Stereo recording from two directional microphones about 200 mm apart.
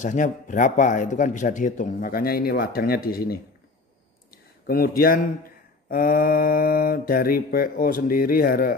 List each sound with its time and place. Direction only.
0.0 s a man's voice: 40° left (ahead or behind)
4.3 s a sound: 50° left (ahead or behind)
5.9 s mantra: 45° left (ahead or behind)